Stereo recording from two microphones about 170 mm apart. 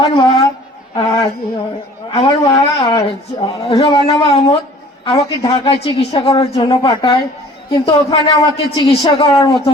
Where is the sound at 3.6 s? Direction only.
30° left (ahead or behind).